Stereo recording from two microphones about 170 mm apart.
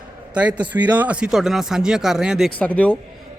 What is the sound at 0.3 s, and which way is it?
Speech, 10° right (ahead or behind).